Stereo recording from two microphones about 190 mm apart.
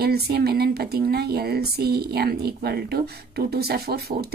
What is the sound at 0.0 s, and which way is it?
Speech, 55° right (ahead or behind).